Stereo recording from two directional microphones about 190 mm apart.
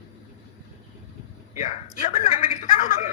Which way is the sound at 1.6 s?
40° left (ahead or behind).